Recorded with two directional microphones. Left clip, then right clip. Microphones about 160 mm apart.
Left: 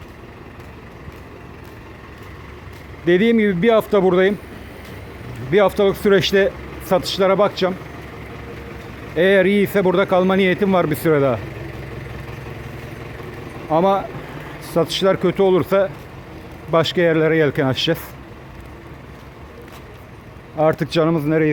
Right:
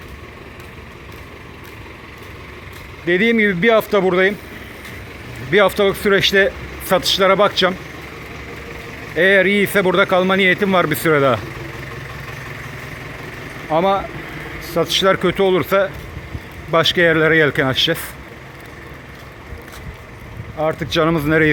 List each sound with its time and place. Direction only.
3.1 s a man's voice: 25° left (ahead or behind)
5.5 s speech: 15° left (ahead or behind)
9.1 s speech: 25° left (ahead or behind)
13.7 s a man's voice: 20° left (ahead or behind)
20.6 s speech: 40° left (ahead or behind)
20.9 s speech: 10° left (ahead or behind)